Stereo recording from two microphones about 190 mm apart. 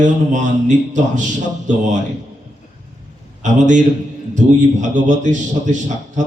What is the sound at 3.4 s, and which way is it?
A man's voice, 40° right (ahead or behind).